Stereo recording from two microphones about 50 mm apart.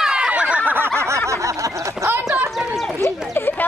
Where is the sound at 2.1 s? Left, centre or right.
Right.